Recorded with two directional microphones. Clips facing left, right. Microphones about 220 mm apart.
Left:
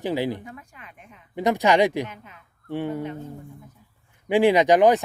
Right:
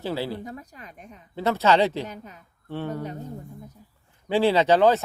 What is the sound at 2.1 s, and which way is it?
Speech, 40° right (ahead or behind).